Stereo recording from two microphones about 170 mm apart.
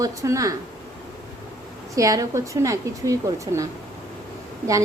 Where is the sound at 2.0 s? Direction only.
20° right (ahead or behind).